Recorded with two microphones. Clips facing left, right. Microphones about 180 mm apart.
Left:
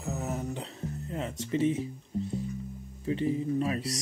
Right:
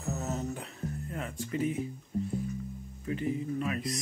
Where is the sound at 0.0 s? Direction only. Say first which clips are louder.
Left 1 dB; 15° left (ahead or behind).